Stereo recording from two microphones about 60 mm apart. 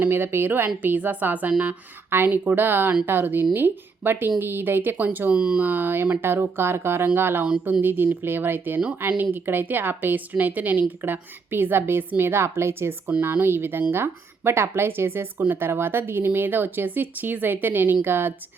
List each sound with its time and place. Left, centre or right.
0.0 s speech: right
2.0 s speech: right
5.3 s speech: centre
5.6 s speech: right